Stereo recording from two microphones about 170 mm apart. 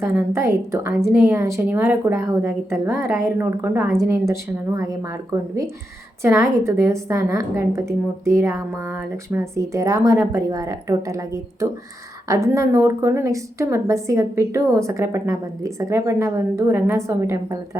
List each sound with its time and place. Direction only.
0.0 s a woman's voice: 15° right (ahead or behind)